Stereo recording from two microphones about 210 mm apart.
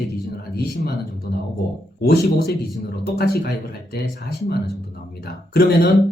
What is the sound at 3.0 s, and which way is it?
Speech, 50° left (ahead or behind).